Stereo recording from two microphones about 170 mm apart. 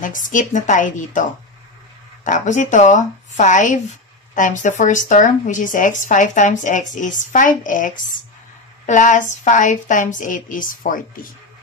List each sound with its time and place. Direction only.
0.0 s speech: 50° left (ahead or behind)
2.2 s speech: 45° left (ahead or behind)